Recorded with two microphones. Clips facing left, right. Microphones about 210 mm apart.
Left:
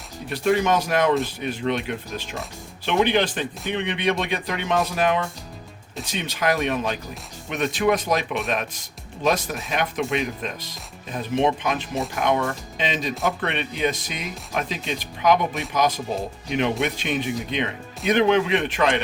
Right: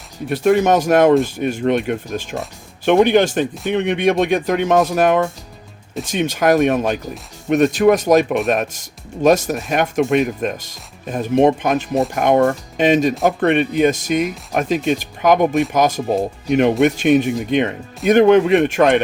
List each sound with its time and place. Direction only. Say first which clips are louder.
0.3 s speech: right 6 dB; 50° right (ahead or behind)